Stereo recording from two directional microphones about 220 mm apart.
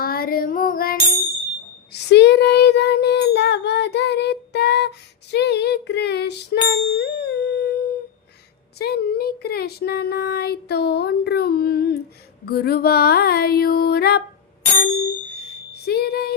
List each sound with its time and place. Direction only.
0.0 s female singing: 45° left (ahead or behind)
1.9 s child singing: 50° left (ahead or behind)
6.7 s a sound: 45° left (ahead or behind)
8.8 s speech: 45° left (ahead or behind)